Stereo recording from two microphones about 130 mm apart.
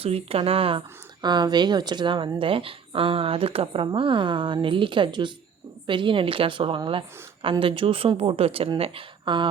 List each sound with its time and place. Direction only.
0.0 s speech: 50° right (ahead or behind)